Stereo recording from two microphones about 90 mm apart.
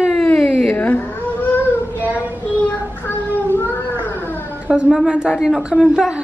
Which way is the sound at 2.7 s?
20° left (ahead or behind).